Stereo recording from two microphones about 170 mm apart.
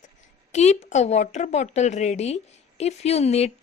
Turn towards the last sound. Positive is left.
turn(degrees=40)  # may be behind; listen again after turning